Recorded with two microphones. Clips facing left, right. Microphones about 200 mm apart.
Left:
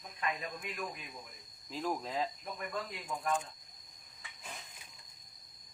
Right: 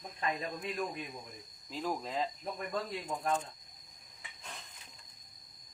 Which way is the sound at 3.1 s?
30° right (ahead or behind).